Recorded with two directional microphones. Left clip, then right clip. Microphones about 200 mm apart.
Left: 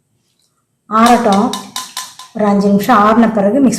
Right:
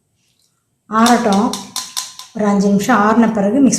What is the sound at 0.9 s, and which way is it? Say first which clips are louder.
Speech: left 3 dB; centre (ahead or behind).